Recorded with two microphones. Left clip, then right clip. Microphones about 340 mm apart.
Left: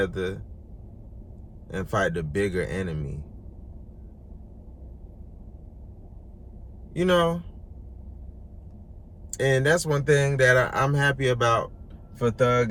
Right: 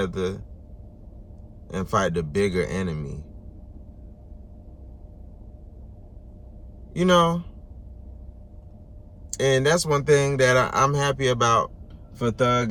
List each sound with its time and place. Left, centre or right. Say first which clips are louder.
0.0 s speech: even; centre
1.6 s speech: right 2 dB; centre
6.9 s speech: right 3 dB; centre
9.4 s speech: right 2 dB; centre